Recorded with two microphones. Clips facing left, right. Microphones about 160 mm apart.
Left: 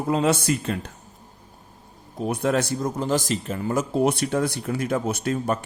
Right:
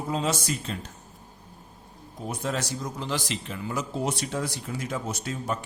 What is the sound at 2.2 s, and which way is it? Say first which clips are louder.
Speech: left 8 dB; 65° left (ahead or behind).